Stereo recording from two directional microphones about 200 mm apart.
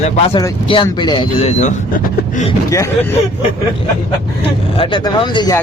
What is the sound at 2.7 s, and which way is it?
Speech, 15° left (ahead or behind).